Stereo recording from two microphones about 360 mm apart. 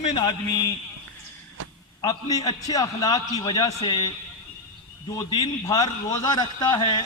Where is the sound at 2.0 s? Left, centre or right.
Centre.